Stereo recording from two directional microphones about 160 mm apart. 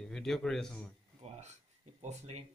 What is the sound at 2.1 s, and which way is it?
Speech, 40° right (ahead or behind).